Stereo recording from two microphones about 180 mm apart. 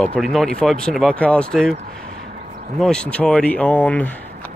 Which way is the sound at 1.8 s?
40° right (ahead or behind).